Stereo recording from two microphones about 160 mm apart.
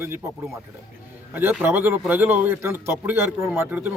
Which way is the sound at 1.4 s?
10° right (ahead or behind).